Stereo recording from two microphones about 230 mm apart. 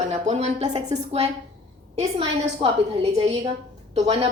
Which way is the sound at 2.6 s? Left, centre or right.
Right.